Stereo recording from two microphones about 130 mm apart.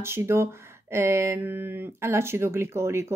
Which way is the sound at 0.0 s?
20° right (ahead or behind).